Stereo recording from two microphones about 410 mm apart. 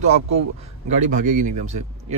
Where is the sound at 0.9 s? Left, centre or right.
Centre.